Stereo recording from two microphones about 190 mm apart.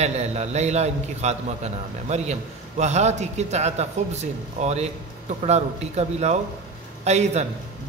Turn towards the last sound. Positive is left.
turn(degrees=-35)  # may be behind; listen again after turning